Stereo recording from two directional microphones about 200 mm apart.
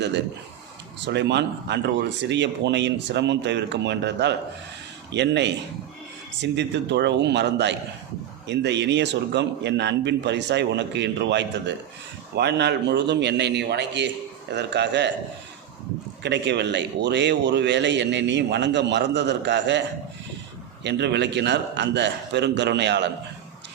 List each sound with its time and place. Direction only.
1.0 s speech: 60° right (ahead or behind)
16.2 s speech: 60° right (ahead or behind)
20.8 s speech: 60° right (ahead or behind)